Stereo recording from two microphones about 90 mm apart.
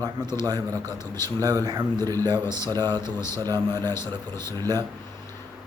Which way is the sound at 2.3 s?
25° left (ahead or behind).